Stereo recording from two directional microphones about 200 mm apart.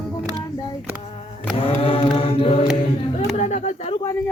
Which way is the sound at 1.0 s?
30° left (ahead or behind).